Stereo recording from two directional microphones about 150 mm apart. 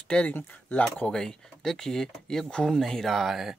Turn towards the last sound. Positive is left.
turn(degrees=0)  # may be behind; listen again after turning